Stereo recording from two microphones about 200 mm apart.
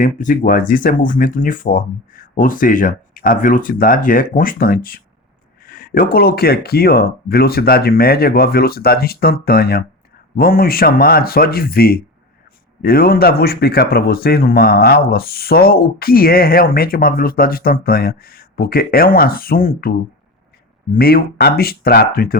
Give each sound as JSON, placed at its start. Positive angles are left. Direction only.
{"t": 0.0, "sound": "speech", "side_deg": 40}